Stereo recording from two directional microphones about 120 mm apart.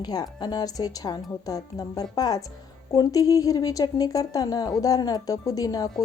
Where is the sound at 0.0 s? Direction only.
35° left (ahead or behind).